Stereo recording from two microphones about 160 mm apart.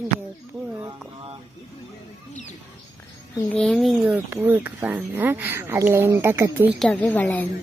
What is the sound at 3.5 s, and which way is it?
Speech, 5° left (ahead or behind).